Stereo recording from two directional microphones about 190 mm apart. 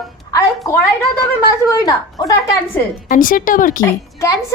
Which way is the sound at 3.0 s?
45° left (ahead or behind).